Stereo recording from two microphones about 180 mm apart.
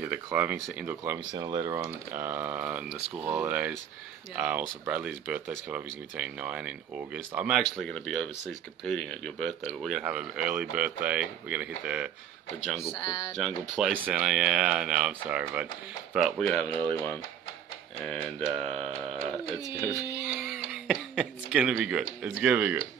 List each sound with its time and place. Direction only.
0.0 s speech: 10° right (ahead or behind)
18.0 s speech: centre (ahead or behind)